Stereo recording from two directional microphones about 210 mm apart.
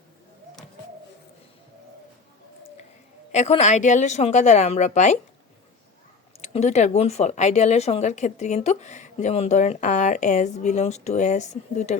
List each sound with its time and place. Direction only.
3.3 s speech: 30° left (ahead or behind)
6.4 s speech: 30° left (ahead or behind)